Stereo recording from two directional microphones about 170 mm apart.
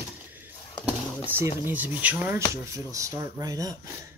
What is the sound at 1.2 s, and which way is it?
Speech, 10° right (ahead or behind).